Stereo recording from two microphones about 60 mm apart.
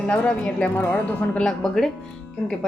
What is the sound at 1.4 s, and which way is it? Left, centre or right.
Speech, centre.